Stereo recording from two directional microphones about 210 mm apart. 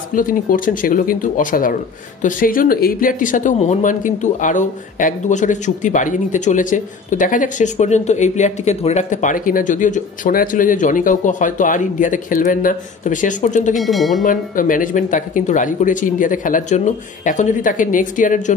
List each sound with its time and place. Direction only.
0.1 s speech: 40° left (ahead or behind)
13.7 s speech: centre (ahead or behind)
14.2 s speech: 40° left (ahead or behind)